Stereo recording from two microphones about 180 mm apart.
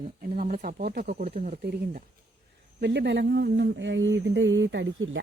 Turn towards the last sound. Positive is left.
turn(degrees=-90)